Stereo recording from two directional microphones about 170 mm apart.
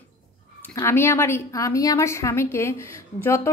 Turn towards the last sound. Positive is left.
turn(degrees=15)  # may be behind; listen again after turning